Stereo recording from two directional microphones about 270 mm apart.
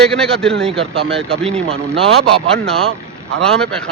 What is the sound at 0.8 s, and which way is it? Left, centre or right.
Speech, right.